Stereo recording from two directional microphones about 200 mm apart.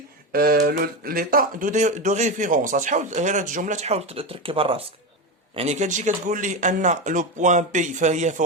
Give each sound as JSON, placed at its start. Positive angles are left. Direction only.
{"t": 0.3, "sound": "speech", "side_deg": -50}